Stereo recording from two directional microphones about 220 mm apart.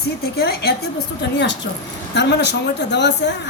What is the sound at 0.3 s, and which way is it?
Speech, 45° left (ahead or behind).